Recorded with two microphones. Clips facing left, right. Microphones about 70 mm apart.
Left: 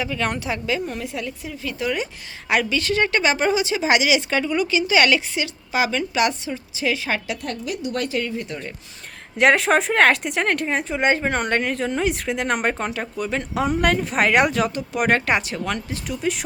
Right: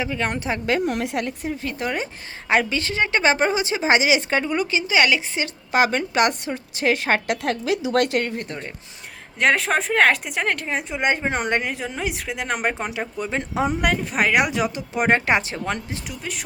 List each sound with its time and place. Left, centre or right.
0.0 s a woman's voice: right
0.6 s a woman's voice: right; by 5.4 s centre
5.4 s a woman's voice: right
7.4 s a woman's voice: right
8.2 s a woman's voice: right
9.4 s a woman's voice: centre; by 13.7 s right
13.8 s a woman's voice: centre; by 16.0 s right